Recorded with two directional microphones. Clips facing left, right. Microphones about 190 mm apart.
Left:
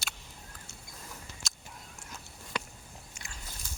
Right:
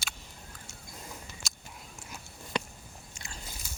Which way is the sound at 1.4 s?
Centre (ahead or behind).